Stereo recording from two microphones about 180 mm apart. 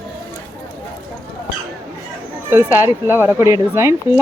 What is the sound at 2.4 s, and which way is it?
Speech, 15° right (ahead or behind).